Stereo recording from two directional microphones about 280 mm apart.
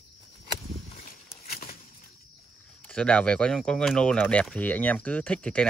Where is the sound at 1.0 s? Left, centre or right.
Left.